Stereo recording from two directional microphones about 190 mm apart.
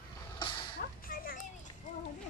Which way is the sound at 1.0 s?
45° left (ahead or behind).